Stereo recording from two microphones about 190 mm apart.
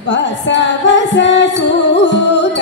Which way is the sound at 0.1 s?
70° left (ahead or behind).